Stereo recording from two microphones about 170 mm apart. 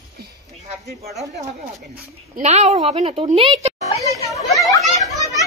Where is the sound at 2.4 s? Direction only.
40° right (ahead or behind).